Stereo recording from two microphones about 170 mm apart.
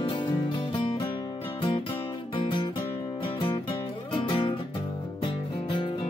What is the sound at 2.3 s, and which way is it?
Music, 30° left (ahead or behind).